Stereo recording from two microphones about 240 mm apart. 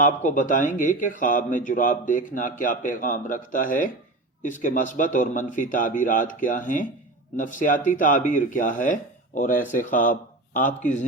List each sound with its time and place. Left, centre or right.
0.0 s speech: left